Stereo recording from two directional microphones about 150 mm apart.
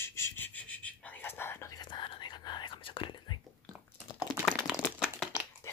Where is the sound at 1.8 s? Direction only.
30° left (ahead or behind).